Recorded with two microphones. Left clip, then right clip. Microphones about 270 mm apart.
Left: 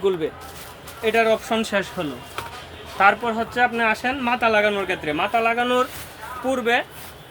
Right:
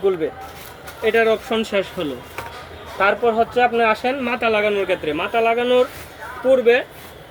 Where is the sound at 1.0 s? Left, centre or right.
Left.